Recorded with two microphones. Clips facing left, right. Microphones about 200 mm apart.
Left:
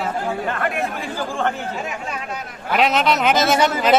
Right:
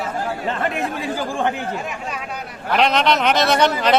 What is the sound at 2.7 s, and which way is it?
A man's voice, 5° left (ahead or behind).